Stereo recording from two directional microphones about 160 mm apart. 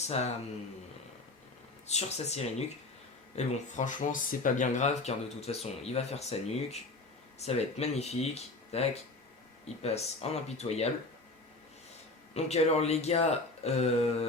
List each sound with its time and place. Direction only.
1.9 s speech: 45° left (ahead or behind)
12.3 s speech: 40° left (ahead or behind)